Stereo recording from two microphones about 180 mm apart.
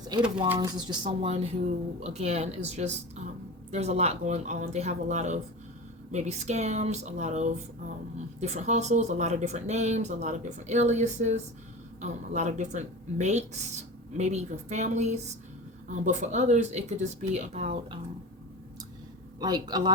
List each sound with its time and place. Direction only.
0.5 s speech: 25° right (ahead or behind)
19.4 s speech: 20° right (ahead or behind)